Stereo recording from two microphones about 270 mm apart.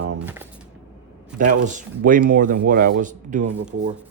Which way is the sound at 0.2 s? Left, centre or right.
Centre.